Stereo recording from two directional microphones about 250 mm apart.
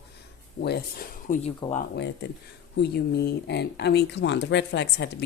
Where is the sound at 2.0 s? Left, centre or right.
Left.